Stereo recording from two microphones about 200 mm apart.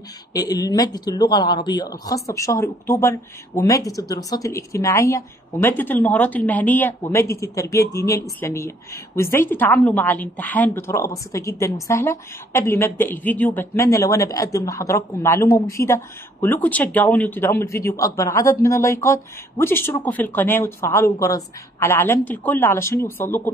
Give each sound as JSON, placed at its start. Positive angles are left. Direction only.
{"t": 0.3, "sound": "a woman's voice", "side_deg": 20}